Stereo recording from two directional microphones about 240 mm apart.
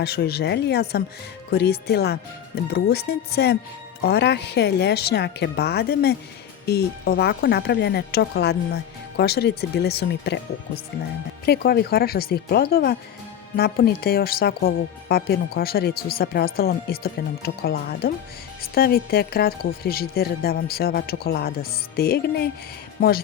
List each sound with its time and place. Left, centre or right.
0.0 s speech: left
11.4 s speech: left